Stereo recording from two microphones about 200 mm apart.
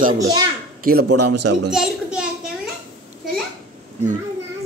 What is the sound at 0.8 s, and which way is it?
Speech, 50° right (ahead or behind).